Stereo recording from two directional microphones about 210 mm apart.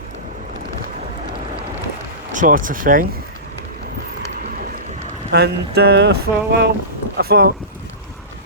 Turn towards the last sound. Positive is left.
turn(degrees=-45)  # may be behind; listen again after turning